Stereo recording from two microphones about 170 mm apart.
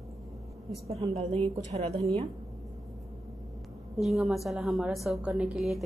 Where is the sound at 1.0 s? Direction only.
35° right (ahead or behind).